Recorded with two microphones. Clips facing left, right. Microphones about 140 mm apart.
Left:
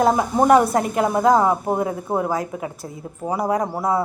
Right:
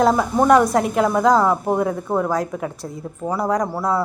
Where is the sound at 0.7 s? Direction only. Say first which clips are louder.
Right 2 dB; centre (ahead or behind).